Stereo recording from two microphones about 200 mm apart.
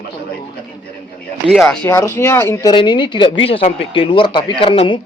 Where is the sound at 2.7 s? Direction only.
25° left (ahead or behind).